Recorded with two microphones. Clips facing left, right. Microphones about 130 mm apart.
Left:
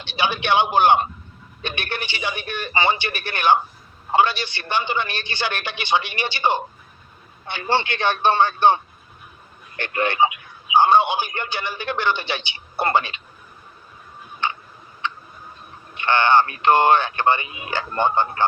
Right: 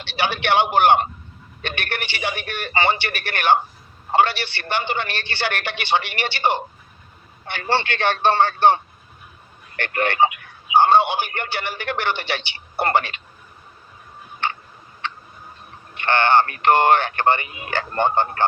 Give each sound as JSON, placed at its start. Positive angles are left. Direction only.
{"t": 0.0, "sound": "a man's voice", "side_deg": 15}
{"t": 16.0, "sound": "a man's voice", "side_deg": 15}